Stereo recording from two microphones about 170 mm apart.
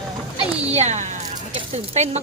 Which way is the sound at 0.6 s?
40° right (ahead or behind).